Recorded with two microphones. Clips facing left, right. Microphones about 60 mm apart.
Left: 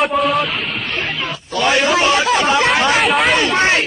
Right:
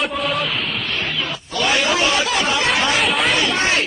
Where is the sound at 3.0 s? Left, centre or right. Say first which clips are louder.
Left 4 dB; centre.